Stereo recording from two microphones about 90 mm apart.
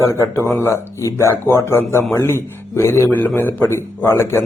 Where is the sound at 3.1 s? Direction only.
20° left (ahead or behind).